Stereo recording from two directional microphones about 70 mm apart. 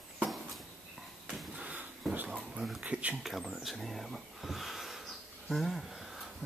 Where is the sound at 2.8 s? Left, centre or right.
Centre.